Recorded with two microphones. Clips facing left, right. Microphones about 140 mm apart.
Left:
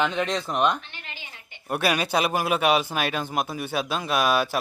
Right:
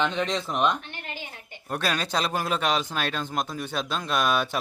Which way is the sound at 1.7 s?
10° left (ahead or behind).